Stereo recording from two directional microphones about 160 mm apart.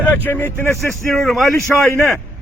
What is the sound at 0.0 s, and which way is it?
Speech, 10° left (ahead or behind).